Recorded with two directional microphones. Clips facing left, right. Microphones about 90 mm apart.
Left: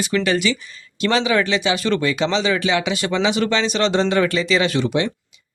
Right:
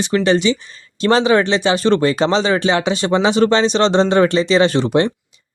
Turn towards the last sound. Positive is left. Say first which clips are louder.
# right 5 dB
turn(degrees=-40)  # may be behind; listen again after turning